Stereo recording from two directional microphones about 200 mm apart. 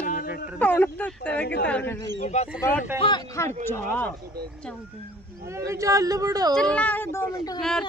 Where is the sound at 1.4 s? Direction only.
55° left (ahead or behind).